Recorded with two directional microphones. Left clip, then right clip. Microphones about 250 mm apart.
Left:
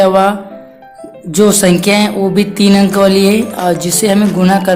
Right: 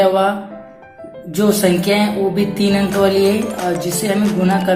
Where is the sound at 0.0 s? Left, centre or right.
Left.